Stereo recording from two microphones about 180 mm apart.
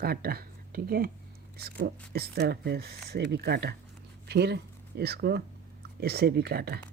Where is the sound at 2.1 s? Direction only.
65° right (ahead or behind).